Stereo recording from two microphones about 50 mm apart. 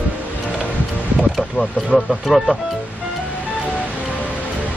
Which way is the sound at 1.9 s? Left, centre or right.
Centre.